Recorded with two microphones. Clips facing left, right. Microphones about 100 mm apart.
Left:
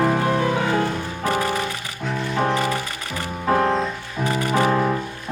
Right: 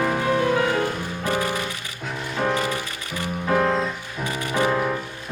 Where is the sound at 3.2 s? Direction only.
30° left (ahead or behind).